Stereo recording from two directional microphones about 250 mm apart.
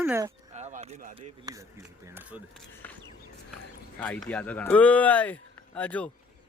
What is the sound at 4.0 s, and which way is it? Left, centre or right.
Speech, centre.